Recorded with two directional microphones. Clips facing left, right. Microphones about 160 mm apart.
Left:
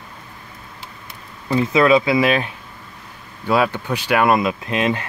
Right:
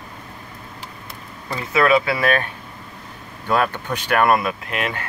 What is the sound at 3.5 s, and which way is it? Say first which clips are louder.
Speech: left 2 dB; 10° left (ahead or behind).